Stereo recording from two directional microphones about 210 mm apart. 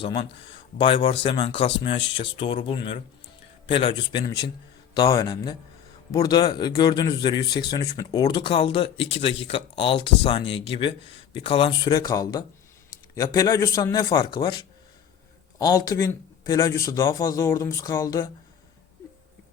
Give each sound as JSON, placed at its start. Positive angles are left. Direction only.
{"t": 0.8, "sound": "speech", "side_deg": 25}